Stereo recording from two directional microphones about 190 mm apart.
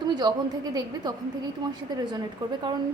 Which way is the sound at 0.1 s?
25° right (ahead or behind).